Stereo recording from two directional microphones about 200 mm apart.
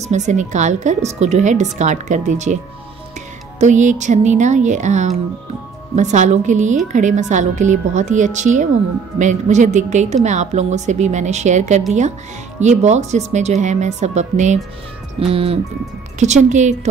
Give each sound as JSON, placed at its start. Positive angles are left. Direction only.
{"t": 0.1, "sound": "a woman's voice", "side_deg": -35}
{"t": 15.1, "sound": "music", "side_deg": -30}
{"t": 16.2, "sound": "a woman's voice", "side_deg": -35}